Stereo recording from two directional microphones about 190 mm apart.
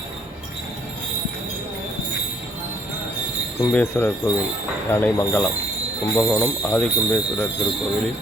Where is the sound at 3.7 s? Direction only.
10° left (ahead or behind).